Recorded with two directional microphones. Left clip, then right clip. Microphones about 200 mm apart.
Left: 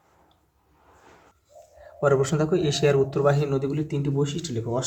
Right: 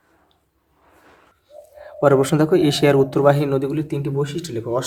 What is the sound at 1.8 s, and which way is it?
Speech, 35° right (ahead or behind).